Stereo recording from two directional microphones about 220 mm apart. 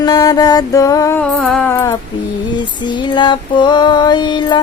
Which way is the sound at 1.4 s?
5° left (ahead or behind).